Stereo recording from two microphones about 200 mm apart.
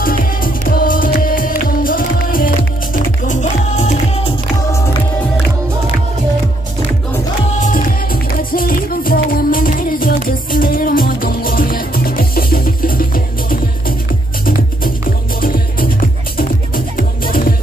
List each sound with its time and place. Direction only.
0.0 s music: 45° left (ahead or behind)
7.6 s music: 45° left (ahead or behind)